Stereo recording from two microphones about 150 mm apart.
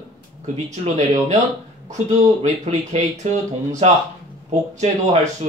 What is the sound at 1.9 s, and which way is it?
A man's voice, 55° right (ahead or behind).